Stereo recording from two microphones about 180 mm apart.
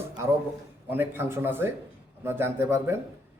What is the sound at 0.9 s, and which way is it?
Speech, 10° right (ahead or behind).